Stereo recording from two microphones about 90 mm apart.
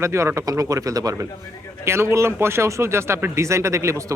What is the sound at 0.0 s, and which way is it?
Speech, 30° right (ahead or behind).